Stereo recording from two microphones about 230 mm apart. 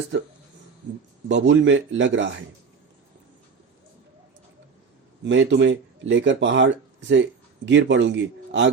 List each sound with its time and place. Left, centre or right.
1.3 s speech: right
5.2 s a man's voice: right